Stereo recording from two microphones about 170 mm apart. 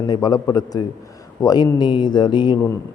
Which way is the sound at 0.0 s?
25° left (ahead or behind).